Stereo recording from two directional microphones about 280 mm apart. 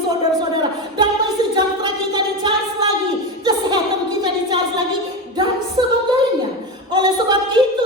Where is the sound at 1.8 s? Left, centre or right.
Centre.